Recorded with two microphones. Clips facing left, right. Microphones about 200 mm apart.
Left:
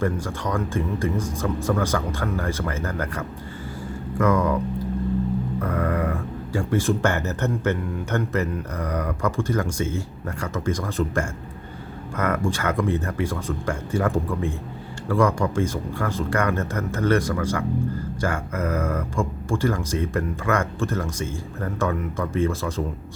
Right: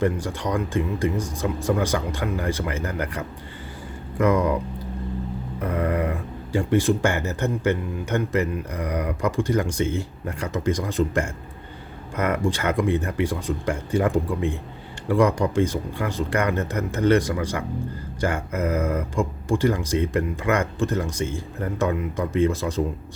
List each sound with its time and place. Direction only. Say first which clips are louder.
0.0 s speech: right 2 dB; 15° right (ahead or behind)
5.5 s speech: right 4 dB; 20° right (ahead or behind)